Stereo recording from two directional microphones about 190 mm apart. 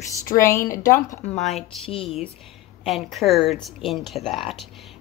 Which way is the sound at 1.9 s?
30° left (ahead or behind).